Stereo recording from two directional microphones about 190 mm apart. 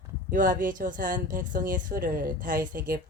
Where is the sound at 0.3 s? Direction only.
45° right (ahead or behind).